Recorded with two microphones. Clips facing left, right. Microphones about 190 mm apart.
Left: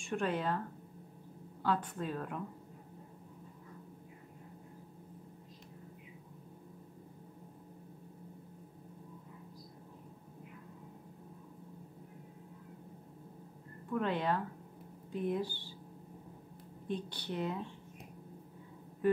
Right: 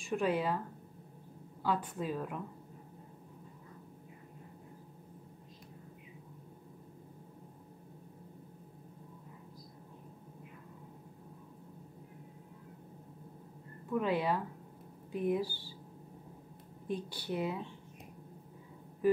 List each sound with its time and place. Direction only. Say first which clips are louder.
0.0 s a woman's voice: right 3 dB; 5° right (ahead or behind)
1.6 s a woman's voice: even; 5° right (ahead or behind)
13.8 s a woman's voice: right 2 dB; 5° right (ahead or behind)
16.8 s speech: right 1 dB; 5° right (ahead or behind)